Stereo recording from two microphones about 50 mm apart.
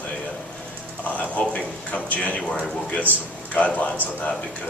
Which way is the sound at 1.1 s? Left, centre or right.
Left.